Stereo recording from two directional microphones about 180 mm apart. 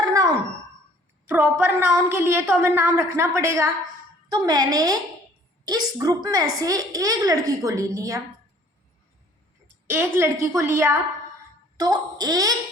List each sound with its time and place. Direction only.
0.0 s a sound: 20° right (ahead or behind)
1.3 s a woman's voice: 10° right (ahead or behind)
9.9 s a woman's voice: 15° right (ahead or behind)